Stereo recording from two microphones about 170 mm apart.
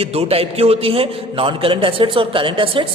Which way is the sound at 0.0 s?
35° right (ahead or behind).